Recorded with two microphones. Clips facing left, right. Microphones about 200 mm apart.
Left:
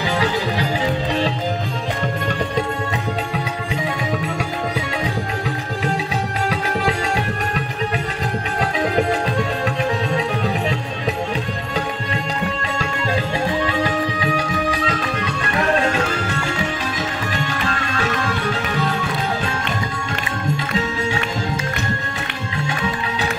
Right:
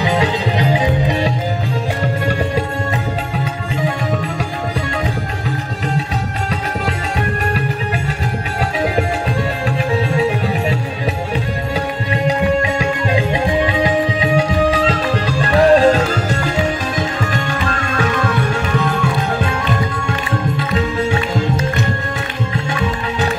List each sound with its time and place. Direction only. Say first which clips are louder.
0.2 s music: right 3 dB; 15° right (ahead or behind)
13.8 s music: right 5 dB; 20° right (ahead or behind)
14.9 s music: right 5 dB; 35° right (ahead or behind)